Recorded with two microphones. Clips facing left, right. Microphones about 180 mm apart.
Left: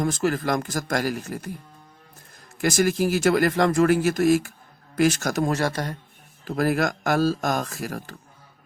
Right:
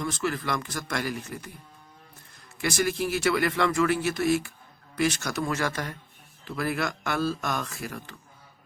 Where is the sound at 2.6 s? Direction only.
45° left (ahead or behind).